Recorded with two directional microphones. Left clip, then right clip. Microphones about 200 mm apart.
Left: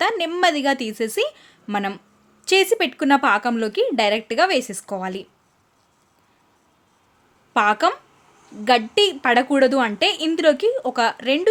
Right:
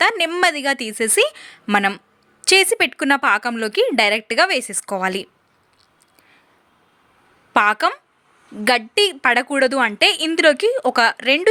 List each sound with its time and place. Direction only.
0.0 s speech: 15° right (ahead or behind)
7.5 s speech: 15° right (ahead or behind)